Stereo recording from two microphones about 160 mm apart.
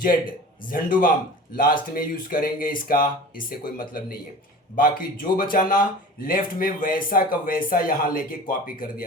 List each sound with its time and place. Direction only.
0.0 s a man's voice: 65° left (ahead or behind)